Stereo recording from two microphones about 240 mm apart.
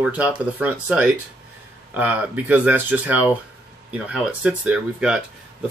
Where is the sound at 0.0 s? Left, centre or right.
Centre.